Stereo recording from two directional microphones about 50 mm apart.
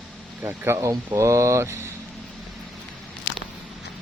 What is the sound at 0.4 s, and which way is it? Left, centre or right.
Speech, right.